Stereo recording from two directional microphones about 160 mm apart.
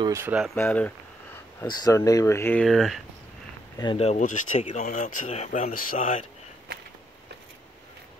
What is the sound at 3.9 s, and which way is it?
Speech, 40° left (ahead or behind).